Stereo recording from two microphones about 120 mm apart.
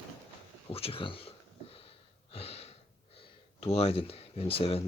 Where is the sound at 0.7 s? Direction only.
55° left (ahead or behind).